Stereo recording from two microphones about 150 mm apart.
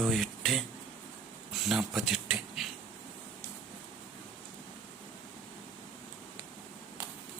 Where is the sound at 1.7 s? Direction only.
Centre (ahead or behind).